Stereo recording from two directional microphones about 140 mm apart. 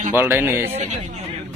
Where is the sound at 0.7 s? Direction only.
50° right (ahead or behind).